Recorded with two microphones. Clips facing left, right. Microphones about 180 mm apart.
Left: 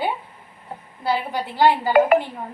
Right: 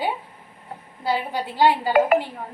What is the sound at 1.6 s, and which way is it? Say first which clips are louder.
Speech: left 1 dB; 15° right (ahead or behind).